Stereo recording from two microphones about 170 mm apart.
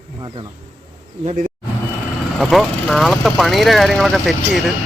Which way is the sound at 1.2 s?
50° right (ahead or behind).